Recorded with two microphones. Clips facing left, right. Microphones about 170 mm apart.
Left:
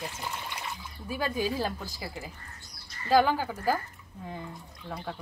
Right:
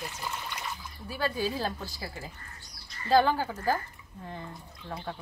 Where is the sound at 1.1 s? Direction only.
15° left (ahead or behind).